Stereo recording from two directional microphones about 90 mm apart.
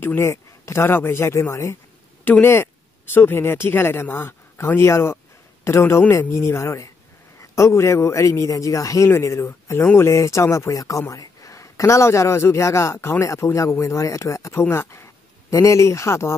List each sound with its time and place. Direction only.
0.0 s a man's voice: 30° left (ahead or behind)